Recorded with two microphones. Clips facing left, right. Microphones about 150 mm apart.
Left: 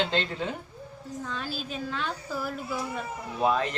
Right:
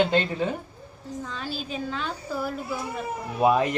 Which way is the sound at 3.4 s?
15° right (ahead or behind).